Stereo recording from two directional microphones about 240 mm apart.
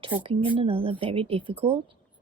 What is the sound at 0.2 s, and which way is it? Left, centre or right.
Speech, right.